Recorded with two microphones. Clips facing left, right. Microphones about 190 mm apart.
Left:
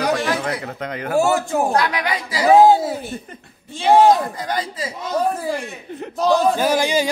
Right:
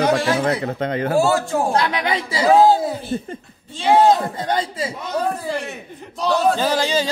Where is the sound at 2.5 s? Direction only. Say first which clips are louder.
Left 2 dB; 15° left (ahead or behind).